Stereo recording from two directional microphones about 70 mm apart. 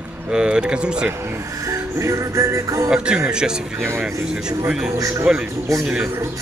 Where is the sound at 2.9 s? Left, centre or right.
Centre.